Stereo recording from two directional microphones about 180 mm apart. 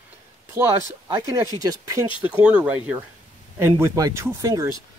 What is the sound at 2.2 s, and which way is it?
Speech, 5° right (ahead or behind).